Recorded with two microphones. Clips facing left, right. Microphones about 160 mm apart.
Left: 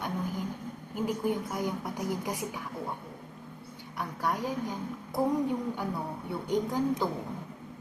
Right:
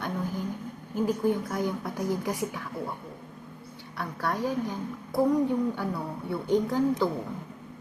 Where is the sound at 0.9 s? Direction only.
20° left (ahead or behind).